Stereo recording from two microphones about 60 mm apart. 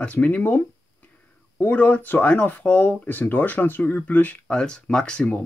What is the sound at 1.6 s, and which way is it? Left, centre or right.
Speech, left.